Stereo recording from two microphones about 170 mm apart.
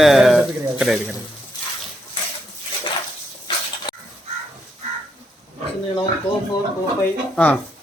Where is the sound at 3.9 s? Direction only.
25° left (ahead or behind).